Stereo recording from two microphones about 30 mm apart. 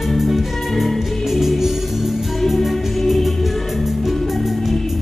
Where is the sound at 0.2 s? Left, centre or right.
Centre.